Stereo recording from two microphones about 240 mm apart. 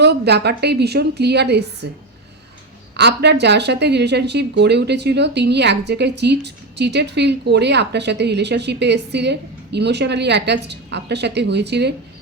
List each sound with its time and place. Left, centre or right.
0.0 s speech: right
2.9 s speech: right